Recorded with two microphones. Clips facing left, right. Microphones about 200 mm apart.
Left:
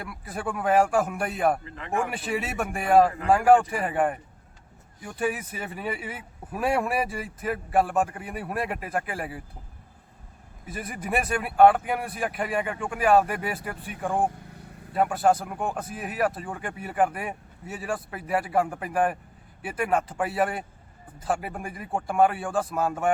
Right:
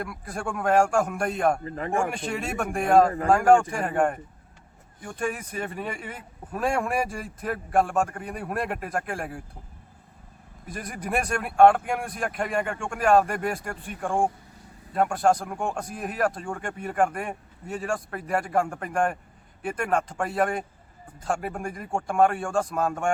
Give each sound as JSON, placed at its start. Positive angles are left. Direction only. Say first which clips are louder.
{"t": 0.0, "sound": "speech", "louder": "right 1 dB", "side_deg": 5}
{"t": 1.6, "sound": "speech", "louder": "right 9 dB", "side_deg": -40}
{"t": 2.1, "sound": "speech", "louder": "even", "side_deg": 5}
{"t": 10.7, "sound": "speech", "louder": "even", "side_deg": 5}